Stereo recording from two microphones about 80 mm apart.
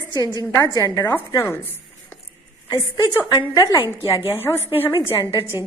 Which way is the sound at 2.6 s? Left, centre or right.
Left.